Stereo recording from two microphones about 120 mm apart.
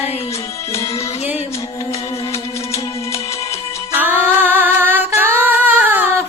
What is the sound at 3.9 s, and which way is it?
Female singing, 15° right (ahead or behind).